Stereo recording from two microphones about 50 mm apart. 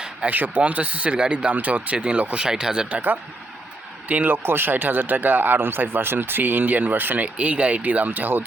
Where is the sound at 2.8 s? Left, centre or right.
Right.